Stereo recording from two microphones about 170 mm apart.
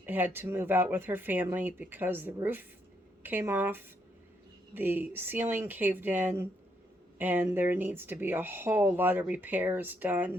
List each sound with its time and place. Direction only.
0.0 s speech: 10° right (ahead or behind)